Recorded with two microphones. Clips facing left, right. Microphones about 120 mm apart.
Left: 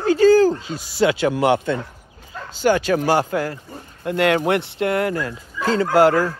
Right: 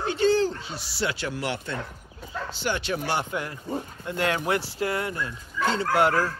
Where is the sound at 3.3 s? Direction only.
75° left (ahead or behind).